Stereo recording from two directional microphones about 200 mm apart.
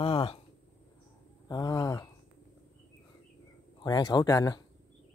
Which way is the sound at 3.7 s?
20° left (ahead or behind).